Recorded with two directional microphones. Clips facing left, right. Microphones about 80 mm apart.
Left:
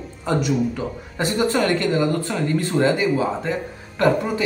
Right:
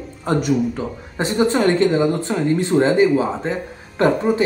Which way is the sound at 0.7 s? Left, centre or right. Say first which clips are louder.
Right 2 dB; right.